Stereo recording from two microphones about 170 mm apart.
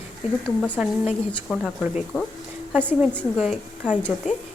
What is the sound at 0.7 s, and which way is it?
Speech, 10° right (ahead or behind).